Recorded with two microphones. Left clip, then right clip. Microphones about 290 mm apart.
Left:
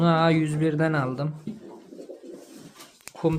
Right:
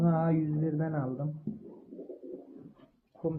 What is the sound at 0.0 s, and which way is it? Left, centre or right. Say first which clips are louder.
Speech: left 9 dB; left.